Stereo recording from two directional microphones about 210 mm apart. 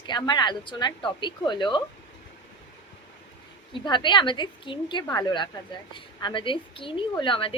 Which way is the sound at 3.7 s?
20° left (ahead or behind).